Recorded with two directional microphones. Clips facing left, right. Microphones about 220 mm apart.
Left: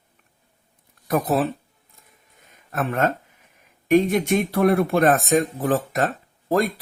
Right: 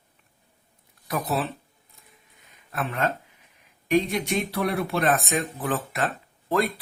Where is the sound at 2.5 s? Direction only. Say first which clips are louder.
Left 5 dB; 50° left (ahead or behind).